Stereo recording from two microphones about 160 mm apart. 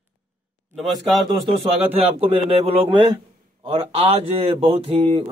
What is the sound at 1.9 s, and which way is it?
Speech, 40° right (ahead or behind).